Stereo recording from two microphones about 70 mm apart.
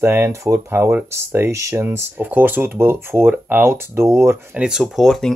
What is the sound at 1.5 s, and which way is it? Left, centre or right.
Speech, right.